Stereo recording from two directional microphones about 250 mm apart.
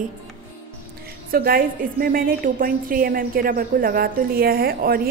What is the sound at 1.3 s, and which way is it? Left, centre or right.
A woman's voice, right.